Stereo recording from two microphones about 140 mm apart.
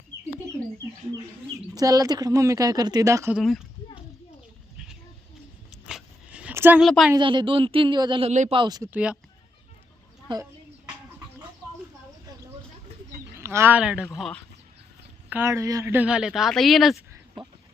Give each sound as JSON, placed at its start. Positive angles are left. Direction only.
{"t": 1.5, "sound": "speech", "side_deg": -25}
{"t": 3.3, "sound": "speech", "side_deg": 0}
{"t": 5.9, "sound": "dog", "side_deg": -10}
{"t": 6.8, "sound": "speech", "side_deg": 0}
{"t": 7.2, "sound": "a man's voice", "side_deg": -35}
{"t": 8.3, "sound": "speech", "side_deg": -60}
{"t": 8.5, "sound": "speech", "side_deg": -30}
{"t": 8.9, "sound": "speech", "side_deg": -10}
{"t": 13.4, "sound": "speech", "side_deg": -20}
{"t": 14.2, "sound": "speech", "side_deg": 5}
{"t": 15.3, "sound": "speech", "side_deg": -15}